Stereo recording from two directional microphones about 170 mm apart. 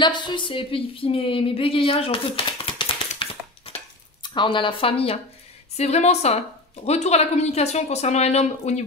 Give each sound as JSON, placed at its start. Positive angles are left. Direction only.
{"t": 0.0, "sound": "speech", "side_deg": 25}
{"t": 3.2, "sound": "a sound", "side_deg": 30}
{"t": 4.2, "sound": "speech", "side_deg": 25}